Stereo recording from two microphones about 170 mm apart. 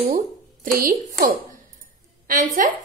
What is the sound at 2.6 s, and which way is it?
Speech, 50° right (ahead or behind).